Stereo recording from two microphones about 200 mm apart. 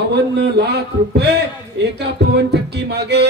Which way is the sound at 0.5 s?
55° right (ahead or behind).